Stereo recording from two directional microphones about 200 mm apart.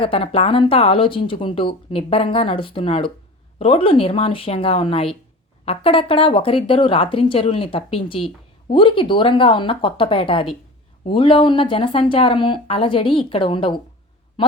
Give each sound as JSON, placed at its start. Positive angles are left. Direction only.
{"t": 0.0, "sound": "speech", "side_deg": 30}